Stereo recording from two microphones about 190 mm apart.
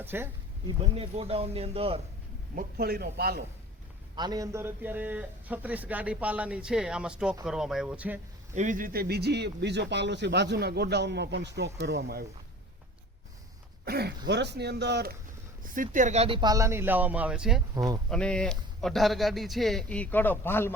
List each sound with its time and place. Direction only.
0.0 s speech: 10° right (ahead or behind)
0.7 s speech: 30° right (ahead or behind)
2.6 s speech: 55° right (ahead or behind)
4.1 s a man's voice: 20° right (ahead or behind)
8.5 s speech: 40° right (ahead or behind); by 12.2 s 55° right (ahead or behind)
13.8 s speech: 55° right (ahead or behind)
15.6 s a man's voice: 45° right (ahead or behind); by 17.6 s 5° right (ahead or behind)
17.7 s speech: 20° right (ahead or behind)
18.1 s speech: 5° left (ahead or behind)